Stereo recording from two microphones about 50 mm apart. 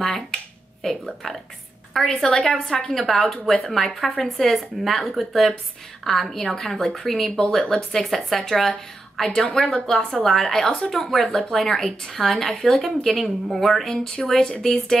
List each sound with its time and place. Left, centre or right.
0.0 s finger snapping: centre
0.8 s a woman's voice: centre
2.2 s a woman's voice: centre
11.2 s a woman's voice: centre
11.5 s a woman's voice: centre